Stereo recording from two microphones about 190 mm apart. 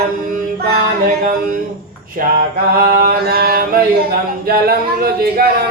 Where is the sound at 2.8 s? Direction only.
50° right (ahead or behind).